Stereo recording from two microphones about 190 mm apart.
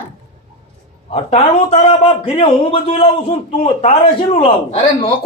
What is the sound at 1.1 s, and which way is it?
A man's voice, 35° left (ahead or behind).